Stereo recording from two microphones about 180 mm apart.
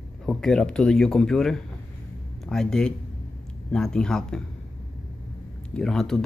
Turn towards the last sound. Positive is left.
turn(degrees=5)  # may be behind; listen again after turning